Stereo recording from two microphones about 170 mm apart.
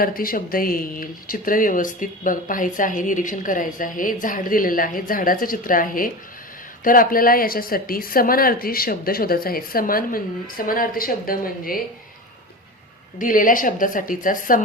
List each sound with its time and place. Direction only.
0.0 s a woman's voice: 55° left (ahead or behind)
13.1 s speech: 50° left (ahead or behind)